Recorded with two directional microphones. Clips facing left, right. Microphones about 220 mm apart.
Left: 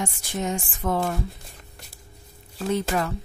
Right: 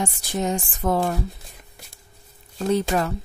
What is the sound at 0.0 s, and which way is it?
Speech, 35° right (ahead or behind).